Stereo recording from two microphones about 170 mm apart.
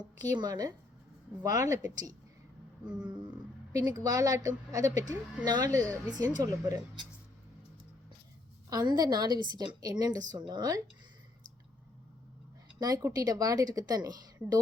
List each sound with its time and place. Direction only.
0.2 s a woman's voice: 25° right (ahead or behind)
2.8 s a sound: 5° right (ahead or behind)
3.7 s a woman's voice: 20° right (ahead or behind)
8.7 s a woman's voice: 25° right (ahead or behind)
12.8 s a woman's voice: 20° right (ahead or behind)